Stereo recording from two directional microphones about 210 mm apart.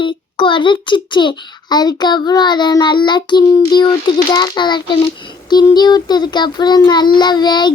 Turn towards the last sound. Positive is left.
turn(degrees=20)  # may be behind; listen again after turning